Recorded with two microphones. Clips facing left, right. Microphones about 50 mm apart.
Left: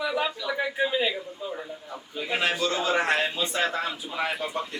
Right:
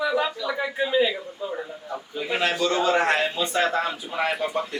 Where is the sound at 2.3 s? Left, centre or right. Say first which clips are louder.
Right 3 dB; centre.